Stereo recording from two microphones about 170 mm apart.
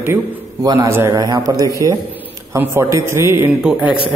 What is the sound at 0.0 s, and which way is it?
A man's voice, 15° right (ahead or behind).